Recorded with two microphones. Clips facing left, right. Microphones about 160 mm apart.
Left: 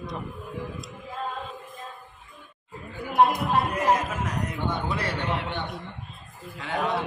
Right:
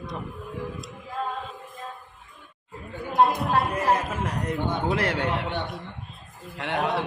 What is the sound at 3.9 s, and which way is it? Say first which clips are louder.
Speech: even; 30° right (ahead or behind).